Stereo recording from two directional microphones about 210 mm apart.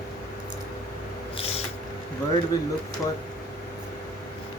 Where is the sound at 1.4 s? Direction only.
30° left (ahead or behind).